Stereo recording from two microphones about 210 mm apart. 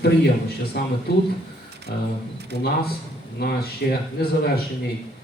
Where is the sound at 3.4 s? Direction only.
50° left (ahead or behind).